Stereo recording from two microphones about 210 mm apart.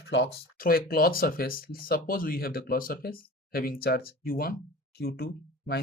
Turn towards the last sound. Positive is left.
turn(degrees=50)  # may be behind; listen again after turning